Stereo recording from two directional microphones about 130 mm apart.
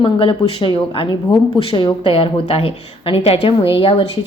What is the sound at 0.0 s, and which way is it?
A woman's voice, 40° left (ahead or behind).